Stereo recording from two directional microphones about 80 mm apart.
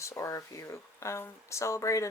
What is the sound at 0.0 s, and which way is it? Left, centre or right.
Speech, left.